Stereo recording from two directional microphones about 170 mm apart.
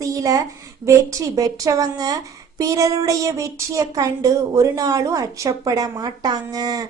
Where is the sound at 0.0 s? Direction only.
20° right (ahead or behind).